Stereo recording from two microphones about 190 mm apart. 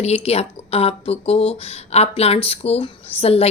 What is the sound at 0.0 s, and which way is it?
Speech, 35° left (ahead or behind).